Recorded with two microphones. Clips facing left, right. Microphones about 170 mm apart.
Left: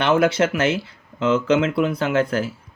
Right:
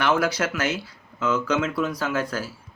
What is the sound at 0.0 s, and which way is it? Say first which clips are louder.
Speech: left 5 dB; 25° left (ahead or behind).